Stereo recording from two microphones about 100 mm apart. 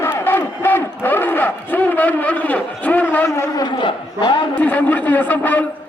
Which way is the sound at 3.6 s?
50° left (ahead or behind).